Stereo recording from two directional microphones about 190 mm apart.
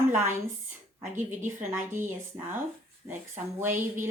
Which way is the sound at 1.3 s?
40° right (ahead or behind).